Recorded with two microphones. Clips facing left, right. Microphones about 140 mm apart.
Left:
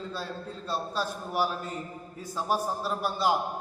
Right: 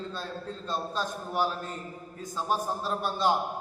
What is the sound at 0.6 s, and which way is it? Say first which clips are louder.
A man's voice: left 1 dB; 10° left (ahead or behind).